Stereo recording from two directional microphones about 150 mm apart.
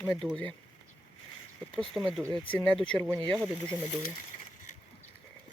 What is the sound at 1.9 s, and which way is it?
Speech, 20° right (ahead or behind).